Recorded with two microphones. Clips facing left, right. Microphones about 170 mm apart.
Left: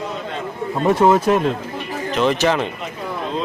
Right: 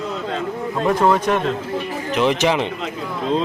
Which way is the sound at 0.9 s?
25° left (ahead or behind).